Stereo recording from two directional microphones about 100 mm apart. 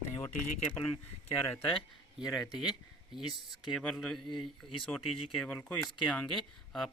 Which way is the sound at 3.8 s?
5° left (ahead or behind).